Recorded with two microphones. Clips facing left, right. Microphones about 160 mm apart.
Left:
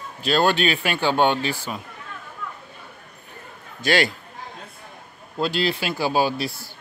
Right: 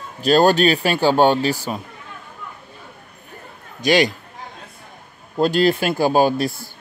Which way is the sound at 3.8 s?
15° right (ahead or behind).